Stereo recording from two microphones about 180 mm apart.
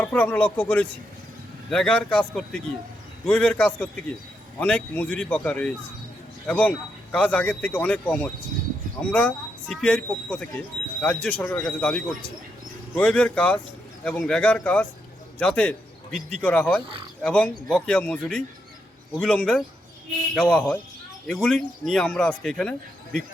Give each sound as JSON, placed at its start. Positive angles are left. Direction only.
{"t": 0.0, "sound": "speech", "side_deg": 10}